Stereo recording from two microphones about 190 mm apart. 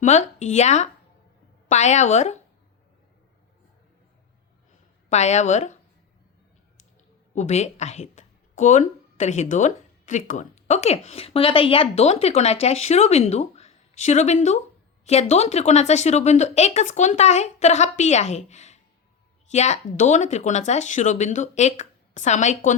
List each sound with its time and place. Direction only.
0.0 s speech: 35° left (ahead or behind)
5.0 s speech: 35° left (ahead or behind)
7.3 s speech: 35° left (ahead or behind)